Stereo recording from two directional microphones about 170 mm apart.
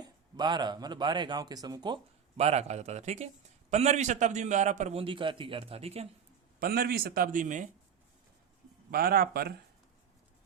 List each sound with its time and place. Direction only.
0.0 s speech: 25° right (ahead or behind)
2.4 s a man's voice: 40° right (ahead or behind)
6.6 s a man's voice: 60° right (ahead or behind)
8.9 s a man's voice: 60° right (ahead or behind)